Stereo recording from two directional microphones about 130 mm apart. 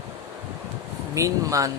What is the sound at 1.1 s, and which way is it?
Speech, 25° right (ahead or behind).